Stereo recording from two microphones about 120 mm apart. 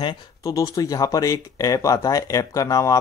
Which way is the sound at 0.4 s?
30° left (ahead or behind).